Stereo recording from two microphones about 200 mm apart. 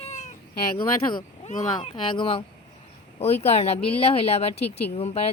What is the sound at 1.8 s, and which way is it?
Speech, 25° left (ahead or behind).